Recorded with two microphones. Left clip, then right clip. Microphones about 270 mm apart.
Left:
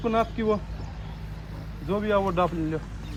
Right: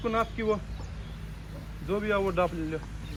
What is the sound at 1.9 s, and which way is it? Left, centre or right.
Speech, left.